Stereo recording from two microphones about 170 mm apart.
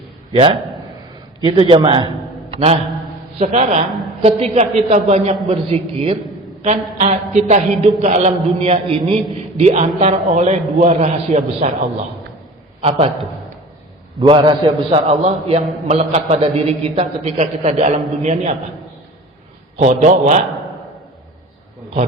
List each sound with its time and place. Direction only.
1.4 s a man's voice: 25° right (ahead or behind)
2.5 s mantra: 35° right (ahead or behind)
3.3 s a man's voice: 40° right (ahead or behind)
14.2 s a man's voice: 25° right (ahead or behind)
19.7 s a man's voice: 40° right (ahead or behind)